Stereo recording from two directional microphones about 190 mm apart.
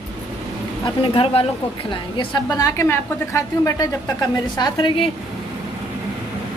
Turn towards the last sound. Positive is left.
turn(degrees=25)  # may be behind; listen again after turning